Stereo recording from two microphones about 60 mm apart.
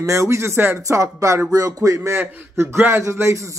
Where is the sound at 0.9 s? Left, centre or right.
Right.